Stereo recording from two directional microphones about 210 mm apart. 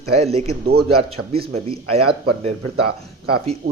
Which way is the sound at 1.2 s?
90° right.